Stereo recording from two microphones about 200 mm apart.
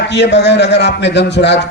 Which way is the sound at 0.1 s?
60° left (ahead or behind).